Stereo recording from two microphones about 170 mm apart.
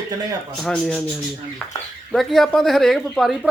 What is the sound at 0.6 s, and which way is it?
Speech, 5° left (ahead or behind).